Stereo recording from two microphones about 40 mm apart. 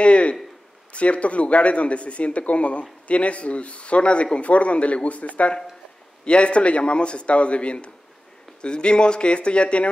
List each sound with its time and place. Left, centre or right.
0.0 s a man's voice: left